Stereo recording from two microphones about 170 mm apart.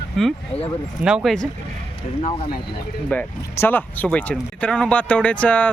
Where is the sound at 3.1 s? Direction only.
10° left (ahead or behind).